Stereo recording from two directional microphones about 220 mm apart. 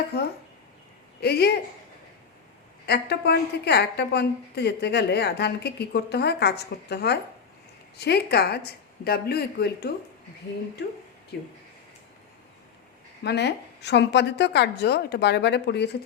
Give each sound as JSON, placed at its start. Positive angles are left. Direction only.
{"t": 1.2, "sound": "a woman's voice", "side_deg": 45}
{"t": 2.8, "sound": "a woman's voice", "side_deg": 50}
{"t": 13.2, "sound": "a woman's voice", "side_deg": 50}